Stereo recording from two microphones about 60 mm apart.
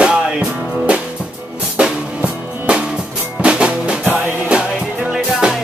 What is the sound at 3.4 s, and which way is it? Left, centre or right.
Music, centre.